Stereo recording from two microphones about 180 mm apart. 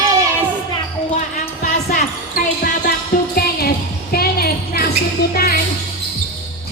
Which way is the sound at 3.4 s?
55° left (ahead or behind).